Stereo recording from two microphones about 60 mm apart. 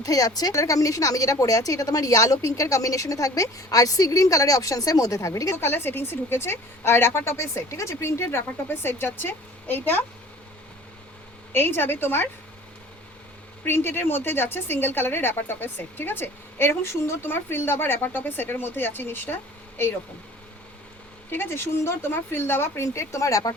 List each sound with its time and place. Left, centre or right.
0.0 s a woman's voice: left
5.5 s a woman's voice: left
11.5 s a woman's voice: left
13.7 s a woman's voice: left
21.2 s speech: left